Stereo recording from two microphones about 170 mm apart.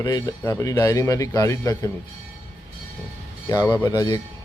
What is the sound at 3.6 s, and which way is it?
Speech, 15° left (ahead or behind).